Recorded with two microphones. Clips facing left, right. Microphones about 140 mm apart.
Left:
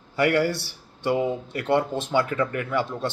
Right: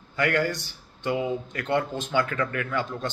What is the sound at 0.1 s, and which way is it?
A man's voice, 30° left (ahead or behind).